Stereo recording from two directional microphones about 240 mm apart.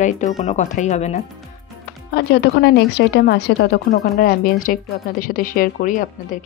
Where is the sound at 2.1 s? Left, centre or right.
Left.